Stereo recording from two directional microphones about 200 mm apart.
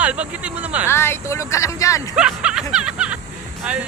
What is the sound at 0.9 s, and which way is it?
Speech, 10° left (ahead or behind).